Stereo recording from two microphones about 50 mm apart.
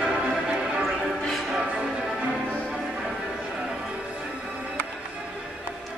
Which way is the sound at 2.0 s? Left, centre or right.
Centre.